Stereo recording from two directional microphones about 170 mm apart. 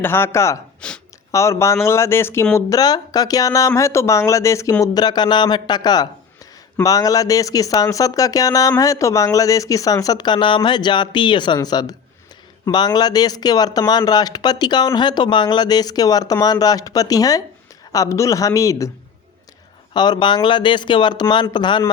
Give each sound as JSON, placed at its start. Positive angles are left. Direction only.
{"t": 0.0, "sound": "speech", "side_deg": 15}
{"t": 0.8, "sound": "a sound", "side_deg": 5}
{"t": 1.3, "sound": "speech", "side_deg": 15}
{"t": 19.9, "sound": "speech", "side_deg": 25}